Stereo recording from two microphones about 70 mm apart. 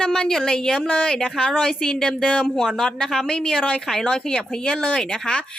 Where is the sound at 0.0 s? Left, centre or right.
Centre.